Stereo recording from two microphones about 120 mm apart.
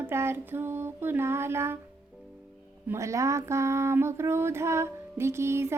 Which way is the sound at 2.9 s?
25° right (ahead or behind).